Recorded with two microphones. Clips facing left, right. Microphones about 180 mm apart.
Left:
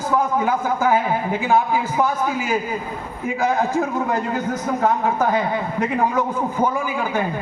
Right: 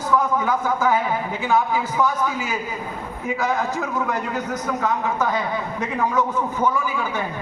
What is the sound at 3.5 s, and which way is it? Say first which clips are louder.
A man's voice: left 4 dB; 30° left (ahead or behind).